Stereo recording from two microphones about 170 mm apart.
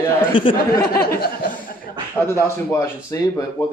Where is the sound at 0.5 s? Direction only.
65° left (ahead or behind).